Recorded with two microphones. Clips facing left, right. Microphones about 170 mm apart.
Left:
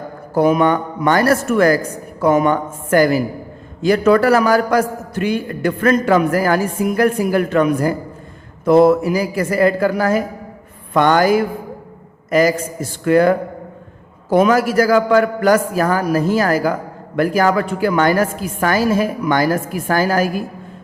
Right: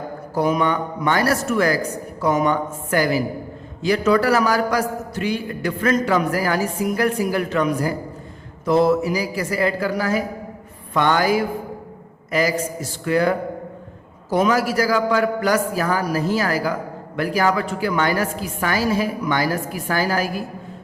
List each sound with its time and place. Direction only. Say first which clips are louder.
0.3 s a man's voice: left 6 dB; 55° left (ahead or behind)